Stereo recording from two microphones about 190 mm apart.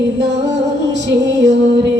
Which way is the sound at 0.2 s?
65° right (ahead or behind).